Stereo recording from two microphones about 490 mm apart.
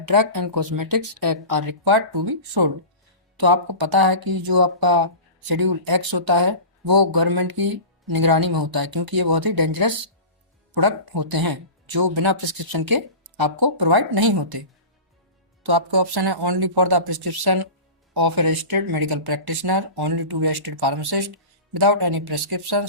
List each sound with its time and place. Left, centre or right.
0.0 s speech: right
15.6 s speech: right